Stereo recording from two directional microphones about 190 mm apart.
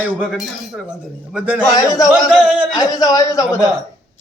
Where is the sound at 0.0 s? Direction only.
5° right (ahead or behind).